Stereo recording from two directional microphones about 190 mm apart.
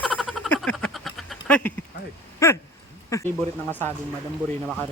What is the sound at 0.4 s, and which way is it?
Frog, 5° left (ahead or behind).